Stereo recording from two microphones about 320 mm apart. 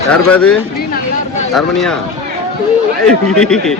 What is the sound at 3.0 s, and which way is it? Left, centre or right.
Speech, centre.